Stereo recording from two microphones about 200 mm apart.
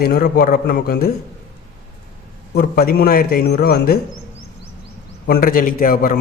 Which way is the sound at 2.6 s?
50° left (ahead or behind).